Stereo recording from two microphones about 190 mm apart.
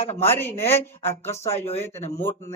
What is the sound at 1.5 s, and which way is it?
Speech, 35° left (ahead or behind).